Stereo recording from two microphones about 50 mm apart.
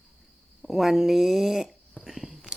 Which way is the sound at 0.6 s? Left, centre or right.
Centre.